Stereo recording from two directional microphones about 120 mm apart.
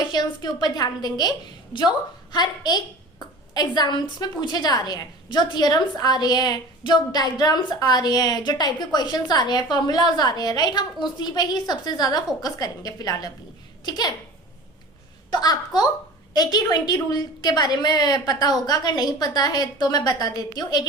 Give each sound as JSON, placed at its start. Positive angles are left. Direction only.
{"t": 0.0, "sound": "a woman's voice", "side_deg": 35}
{"t": 15.3, "sound": "a woman's voice", "side_deg": 35}